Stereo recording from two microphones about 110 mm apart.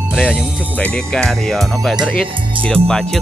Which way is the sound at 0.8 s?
10° left (ahead or behind).